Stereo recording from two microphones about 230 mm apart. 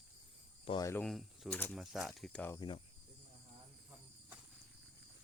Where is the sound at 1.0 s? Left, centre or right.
Centre.